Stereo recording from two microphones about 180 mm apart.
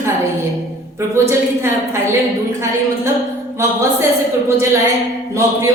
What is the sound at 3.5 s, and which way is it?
A woman's voice, 15° right (ahead or behind).